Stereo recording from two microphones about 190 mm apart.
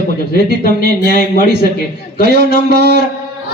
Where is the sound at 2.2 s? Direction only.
60° right (ahead or behind).